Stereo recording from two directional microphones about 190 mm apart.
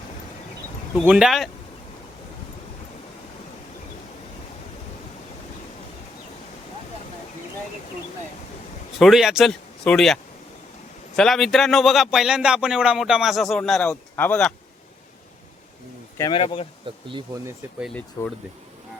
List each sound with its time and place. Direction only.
1.0 s a man's voice: 5° right (ahead or behind)
9.0 s speech: centre (ahead or behind)
11.2 s a man's voice: centre (ahead or behind)
16.1 s speech: 20° left (ahead or behind)
16.4 s speech: 30° left (ahead or behind)
16.9 s speech: 30° right (ahead or behind)
17.4 s a man's voice: 5° right (ahead or behind)
18.2 s speech: 15° left (ahead or behind)